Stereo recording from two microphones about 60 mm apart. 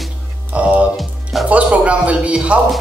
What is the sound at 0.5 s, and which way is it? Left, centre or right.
Music, centre.